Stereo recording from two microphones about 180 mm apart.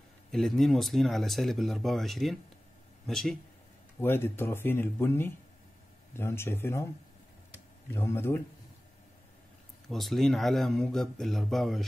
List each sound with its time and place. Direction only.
0.3 s speech: centre (ahead or behind)
4.0 s speech: 10° left (ahead or behind)
7.9 s speech: 15° left (ahead or behind)
9.8 s speech: centre (ahead or behind)